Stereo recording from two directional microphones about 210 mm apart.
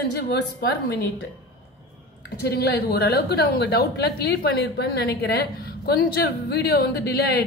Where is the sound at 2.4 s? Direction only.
50° left (ahead or behind).